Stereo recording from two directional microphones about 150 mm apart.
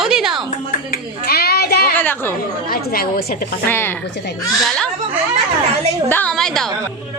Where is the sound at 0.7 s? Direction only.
85° left.